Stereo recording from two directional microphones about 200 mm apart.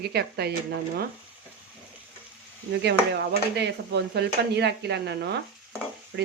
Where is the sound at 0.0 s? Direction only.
55° right (ahead or behind).